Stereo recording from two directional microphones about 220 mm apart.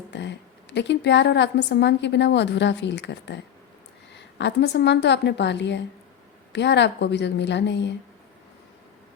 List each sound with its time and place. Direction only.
0.1 s a woman's voice: 55° left (ahead or behind)